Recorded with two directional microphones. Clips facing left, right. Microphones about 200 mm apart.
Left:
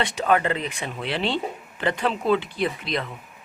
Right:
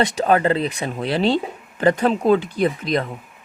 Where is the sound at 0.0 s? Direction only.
40° right (ahead or behind).